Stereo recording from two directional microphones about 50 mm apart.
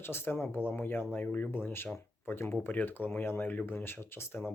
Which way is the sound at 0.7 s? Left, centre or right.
Left.